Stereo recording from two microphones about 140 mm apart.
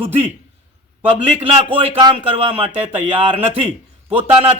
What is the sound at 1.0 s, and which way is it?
Speech, 40° right (ahead or behind).